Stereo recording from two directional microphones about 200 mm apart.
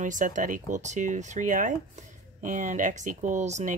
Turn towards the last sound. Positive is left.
turn(degrees=-35)  # may be behind; listen again after turning